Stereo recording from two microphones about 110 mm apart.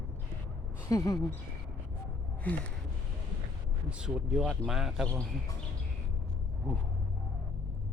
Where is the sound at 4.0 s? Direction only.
5° right (ahead or behind).